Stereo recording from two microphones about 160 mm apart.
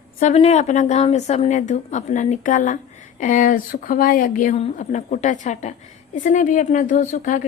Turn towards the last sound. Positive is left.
turn(degrees=55)  # may be behind; listen again after turning